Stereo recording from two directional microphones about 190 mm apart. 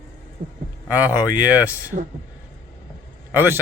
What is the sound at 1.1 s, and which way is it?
Speech, 10° right (ahead or behind).